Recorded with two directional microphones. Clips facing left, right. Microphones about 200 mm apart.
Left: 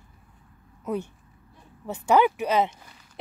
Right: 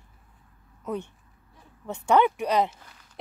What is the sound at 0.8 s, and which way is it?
Speech, 10° left (ahead or behind).